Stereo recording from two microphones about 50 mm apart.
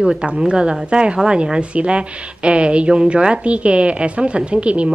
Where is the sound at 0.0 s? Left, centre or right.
Right.